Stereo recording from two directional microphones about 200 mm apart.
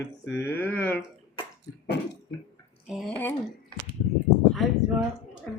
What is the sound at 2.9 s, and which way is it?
Speech, centre (ahead or behind).